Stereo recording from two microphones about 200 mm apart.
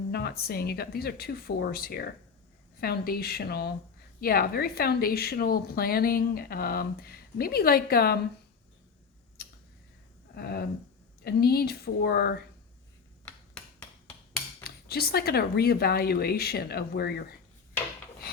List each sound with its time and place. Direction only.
0.1 s a woman's voice: 55° left (ahead or behind)
9.4 s tick: 55° left (ahead or behind)
10.3 s a woman's voice: 50° left (ahead or behind)
13.2 s finger snapping: 5° left (ahead or behind)
14.6 s a woman's voice: 50° left (ahead or behind)